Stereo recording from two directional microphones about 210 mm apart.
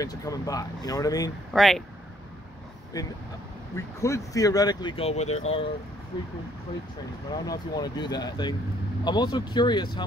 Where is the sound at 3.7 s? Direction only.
15° left (ahead or behind); by 5.4 s 30° left (ahead or behind).